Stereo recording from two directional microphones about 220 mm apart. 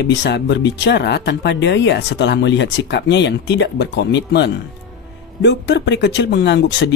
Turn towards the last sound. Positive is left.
turn(degrees=50)  # may be behind; listen again after turning